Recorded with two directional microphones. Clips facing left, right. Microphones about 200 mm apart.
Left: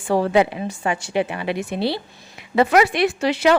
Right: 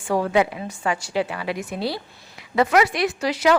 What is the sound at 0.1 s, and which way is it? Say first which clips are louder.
A woman's voice: left 3 dB; 30° left (ahead or behind).